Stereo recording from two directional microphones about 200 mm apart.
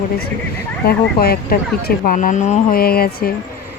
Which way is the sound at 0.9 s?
50° left (ahead or behind).